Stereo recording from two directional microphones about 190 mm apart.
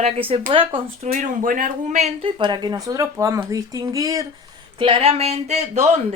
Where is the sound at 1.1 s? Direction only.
45° right (ahead or behind).